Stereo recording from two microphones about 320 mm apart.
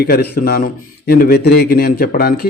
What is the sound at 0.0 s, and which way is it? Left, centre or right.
A man's voice, left.